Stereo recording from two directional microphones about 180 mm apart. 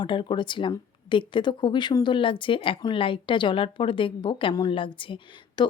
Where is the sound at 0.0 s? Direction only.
25° left (ahead or behind).